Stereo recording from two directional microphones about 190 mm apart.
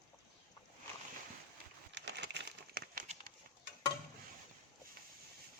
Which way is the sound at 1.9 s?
65° right (ahead or behind).